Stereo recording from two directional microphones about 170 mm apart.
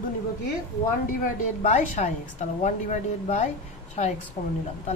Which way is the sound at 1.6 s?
45° left (ahead or behind).